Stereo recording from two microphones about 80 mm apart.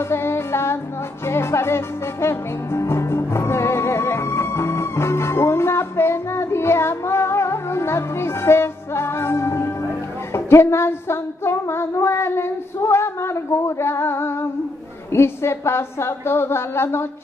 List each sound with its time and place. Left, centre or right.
0.1 s music: left
10.3 s a sound: left
15.1 s a woman's voice: left